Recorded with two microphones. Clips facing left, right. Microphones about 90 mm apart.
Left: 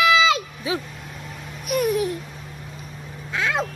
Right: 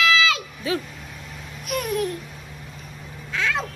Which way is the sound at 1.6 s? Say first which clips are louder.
Left 4 dB; 5° left (ahead or behind).